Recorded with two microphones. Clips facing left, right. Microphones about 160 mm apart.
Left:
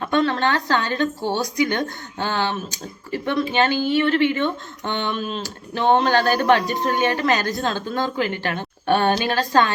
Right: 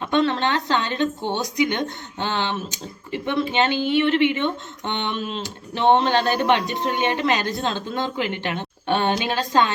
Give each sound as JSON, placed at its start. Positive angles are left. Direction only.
{"t": 0.1, "sound": "speech", "side_deg": -25}